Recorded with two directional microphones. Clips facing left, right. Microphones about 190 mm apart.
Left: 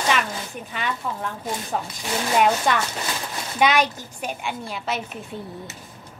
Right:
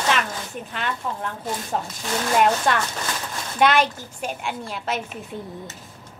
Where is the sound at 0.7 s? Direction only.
Centre (ahead or behind).